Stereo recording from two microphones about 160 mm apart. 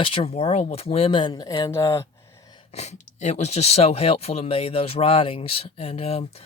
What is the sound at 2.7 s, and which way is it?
Speech, 45° left (ahead or behind).